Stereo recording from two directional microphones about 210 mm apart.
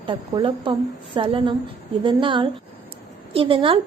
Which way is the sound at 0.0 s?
20° right (ahead or behind).